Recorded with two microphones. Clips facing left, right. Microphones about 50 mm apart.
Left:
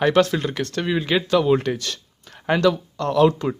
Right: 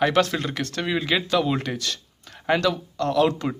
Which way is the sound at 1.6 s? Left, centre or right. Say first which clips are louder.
Left 4 dB; left.